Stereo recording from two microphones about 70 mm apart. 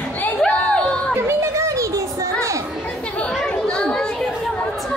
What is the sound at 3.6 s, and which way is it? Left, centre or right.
Children playing, centre.